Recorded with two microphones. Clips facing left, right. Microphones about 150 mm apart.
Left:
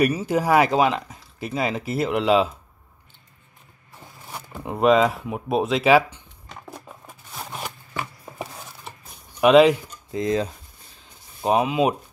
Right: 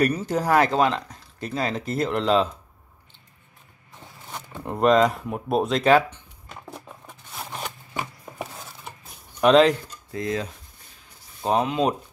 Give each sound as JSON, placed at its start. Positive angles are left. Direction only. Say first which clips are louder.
{"t": 0.0, "sound": "speech", "louder": "left 2 dB", "side_deg": 10}
{"t": 3.9, "sound": "speech", "louder": "even", "side_deg": 10}
{"t": 6.7, "sound": "a sound", "louder": "even", "side_deg": 5}
{"t": 9.4, "sound": "speech", "louder": "left 2 dB", "side_deg": 10}
{"t": 10.1, "sound": "speech", "louder": "left 5 dB", "side_deg": 25}
{"t": 11.4, "sound": "speech", "louder": "left 2 dB", "side_deg": 10}